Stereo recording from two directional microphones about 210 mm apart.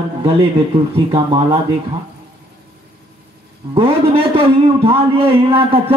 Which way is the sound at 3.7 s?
25° right (ahead or behind).